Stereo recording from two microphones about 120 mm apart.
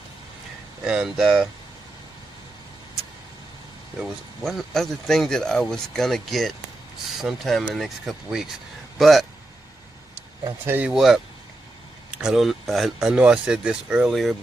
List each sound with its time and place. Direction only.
0.8 s speech: 5° right (ahead or behind)
4.0 s speech: centre (ahead or behind)
10.6 s speech: 15° right (ahead or behind)
10.9 s speech: 5° right (ahead or behind)
12.2 s speech: 5° right (ahead or behind)